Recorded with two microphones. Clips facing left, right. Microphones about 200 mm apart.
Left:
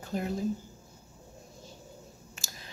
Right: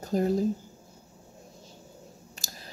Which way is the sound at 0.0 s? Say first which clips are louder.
Right 7 dB; 40° right (ahead or behind).